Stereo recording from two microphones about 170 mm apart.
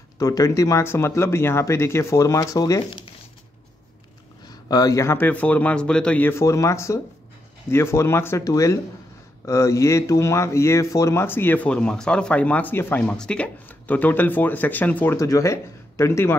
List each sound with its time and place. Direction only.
0.2 s speech: 20° left (ahead or behind)
4.5 s speech: 20° left (ahead or behind)